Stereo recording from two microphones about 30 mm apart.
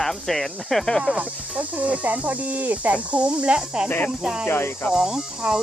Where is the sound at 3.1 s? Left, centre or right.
Right.